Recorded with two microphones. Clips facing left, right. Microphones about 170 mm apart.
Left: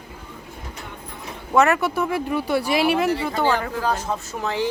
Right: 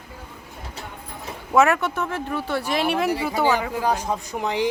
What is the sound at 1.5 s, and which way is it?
Speech, centre (ahead or behind).